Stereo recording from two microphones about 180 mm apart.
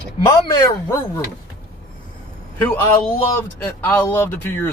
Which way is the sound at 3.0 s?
15° left (ahead or behind).